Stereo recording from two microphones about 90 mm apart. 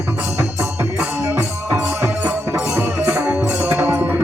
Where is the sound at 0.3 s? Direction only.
35° right (ahead or behind).